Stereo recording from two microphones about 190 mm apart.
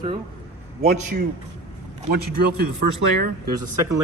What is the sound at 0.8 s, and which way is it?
Speech, 40° right (ahead or behind).